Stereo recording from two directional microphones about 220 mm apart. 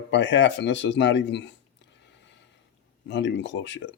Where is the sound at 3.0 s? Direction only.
50° left (ahead or behind).